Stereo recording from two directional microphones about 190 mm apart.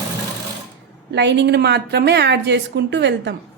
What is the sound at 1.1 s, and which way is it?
A woman's voice, 65° right (ahead or behind).